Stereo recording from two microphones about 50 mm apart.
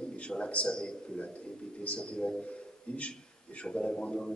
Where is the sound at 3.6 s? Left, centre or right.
Centre.